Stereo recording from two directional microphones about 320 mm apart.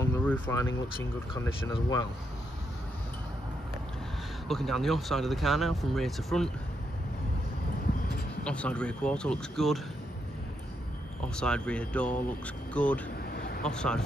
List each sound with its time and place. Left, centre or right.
0.0 s a sound: centre
1.3 s speech: centre
4.5 s speech: centre
8.5 s speech: centre
11.2 s speech: centre
13.3 s a sound: left
13.6 s speech: centre